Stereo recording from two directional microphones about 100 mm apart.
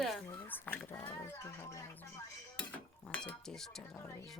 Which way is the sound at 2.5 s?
15° left (ahead or behind).